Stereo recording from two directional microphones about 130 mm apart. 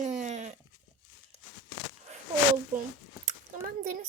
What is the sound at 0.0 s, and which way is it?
Goat, 65° right (ahead or behind).